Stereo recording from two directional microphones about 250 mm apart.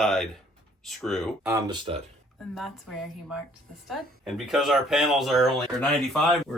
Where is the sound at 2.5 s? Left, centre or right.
Centre.